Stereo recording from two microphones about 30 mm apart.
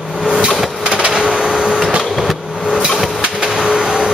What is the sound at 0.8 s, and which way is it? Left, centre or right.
Printer, right.